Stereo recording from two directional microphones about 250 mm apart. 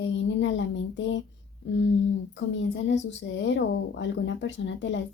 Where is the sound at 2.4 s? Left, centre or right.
Left.